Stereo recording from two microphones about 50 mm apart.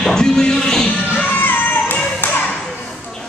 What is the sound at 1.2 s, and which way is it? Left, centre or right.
Music, left.